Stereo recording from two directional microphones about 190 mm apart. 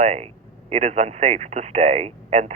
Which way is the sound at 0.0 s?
35° right (ahead or behind).